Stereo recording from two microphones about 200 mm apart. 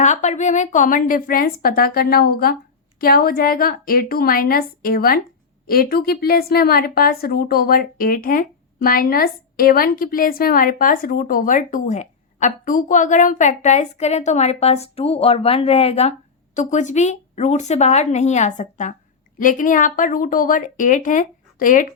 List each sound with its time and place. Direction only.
0.0 s a woman's voice: 35° left (ahead or behind)